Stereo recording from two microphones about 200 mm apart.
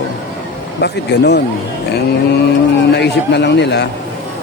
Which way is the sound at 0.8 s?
55° left (ahead or behind).